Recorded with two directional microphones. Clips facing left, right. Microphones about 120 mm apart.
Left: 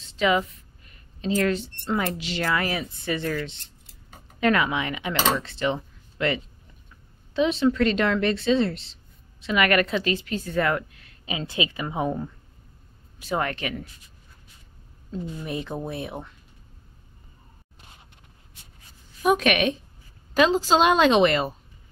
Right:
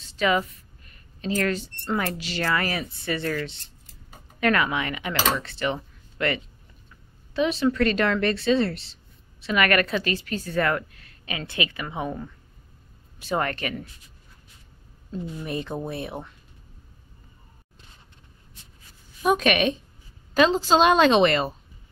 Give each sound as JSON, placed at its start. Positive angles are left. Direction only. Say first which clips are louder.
{"t": 2.0, "sound": "a woman's voice", "louder": "left 1 dB", "side_deg": 20}
{"t": 13.3, "sound": "a woman's voice", "louder": "right 1 dB", "side_deg": 10}
{"t": 15.0, "sound": "speech", "louder": "even", "side_deg": 0}
{"t": 19.2, "sound": "a woman's voice", "louder": "even", "side_deg": 10}